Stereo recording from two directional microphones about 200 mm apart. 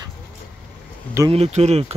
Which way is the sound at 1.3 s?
30° right (ahead or behind).